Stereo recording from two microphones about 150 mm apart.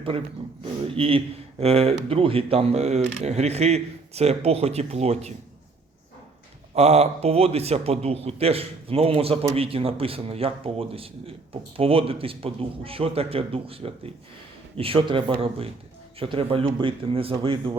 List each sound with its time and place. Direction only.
0.6 s speech: 40° right (ahead or behind)
6.7 s a man's voice: 45° right (ahead or behind)